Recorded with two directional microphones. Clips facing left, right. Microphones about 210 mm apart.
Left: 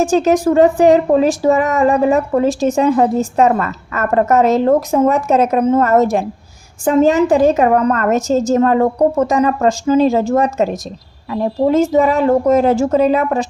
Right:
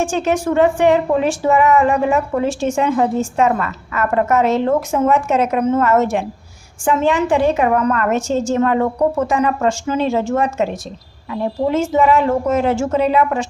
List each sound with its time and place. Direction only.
0.0 s speech: 40° left (ahead or behind)